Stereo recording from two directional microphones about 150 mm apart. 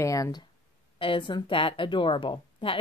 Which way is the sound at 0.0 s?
20° left (ahead or behind).